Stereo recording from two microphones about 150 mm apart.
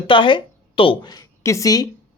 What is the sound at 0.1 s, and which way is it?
A woman's voice, 35° left (ahead or behind).